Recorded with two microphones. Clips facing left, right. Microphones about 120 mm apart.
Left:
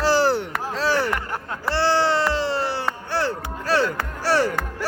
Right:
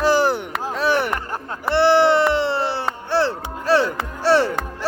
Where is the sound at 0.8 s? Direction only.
20° right (ahead or behind).